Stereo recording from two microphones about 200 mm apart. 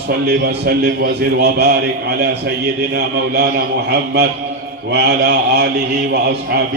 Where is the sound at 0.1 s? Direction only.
50° right (ahead or behind).